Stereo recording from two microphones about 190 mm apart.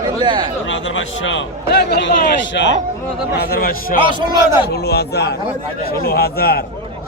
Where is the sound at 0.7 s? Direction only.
75° left (ahead or behind).